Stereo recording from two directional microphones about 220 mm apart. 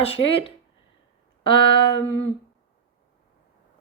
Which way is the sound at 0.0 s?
25° left (ahead or behind).